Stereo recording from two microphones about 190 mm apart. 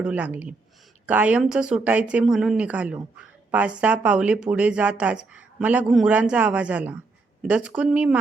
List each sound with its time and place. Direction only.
0.0 s speech: 10° right (ahead or behind)